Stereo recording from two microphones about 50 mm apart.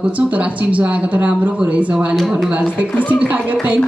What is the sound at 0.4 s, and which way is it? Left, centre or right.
A woman's voice, right.